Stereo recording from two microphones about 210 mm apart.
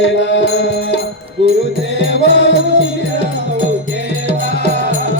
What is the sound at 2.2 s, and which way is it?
Music, 55° left (ahead or behind).